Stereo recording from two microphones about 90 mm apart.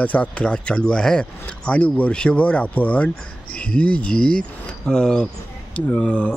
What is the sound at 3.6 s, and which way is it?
Speech, 10° left (ahead or behind).